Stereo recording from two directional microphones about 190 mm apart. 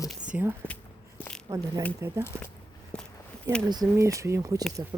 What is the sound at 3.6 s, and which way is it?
Speech, 20° right (ahead or behind).